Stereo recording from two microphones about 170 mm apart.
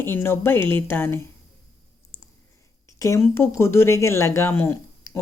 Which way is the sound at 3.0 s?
15° left (ahead or behind).